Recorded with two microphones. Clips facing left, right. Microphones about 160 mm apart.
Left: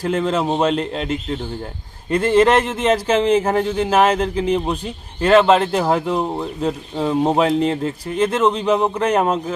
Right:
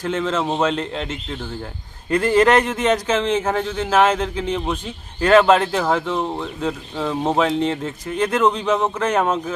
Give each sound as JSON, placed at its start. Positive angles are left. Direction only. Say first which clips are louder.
{"t": 0.0, "sound": "speech", "louder": "left 3 dB", "side_deg": 5}
{"t": 3.1, "sound": "speech", "louder": "left 4 dB", "side_deg": 35}
{"t": 3.4, "sound": "speech", "louder": "left 4 dB", "side_deg": 10}